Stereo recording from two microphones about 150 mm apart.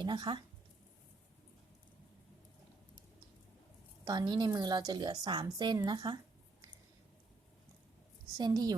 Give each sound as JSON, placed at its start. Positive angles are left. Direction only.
{"t": 0.0, "sound": "speech", "side_deg": -30}
{"t": 4.0, "sound": "a woman's voice", "side_deg": -25}
{"t": 8.4, "sound": "a woman's voice", "side_deg": -25}